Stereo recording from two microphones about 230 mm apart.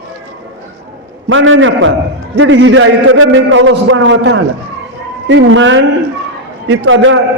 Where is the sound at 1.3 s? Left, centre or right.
Right.